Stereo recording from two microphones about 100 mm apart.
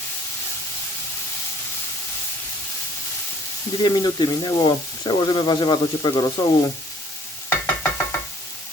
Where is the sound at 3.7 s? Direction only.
45° left (ahead or behind).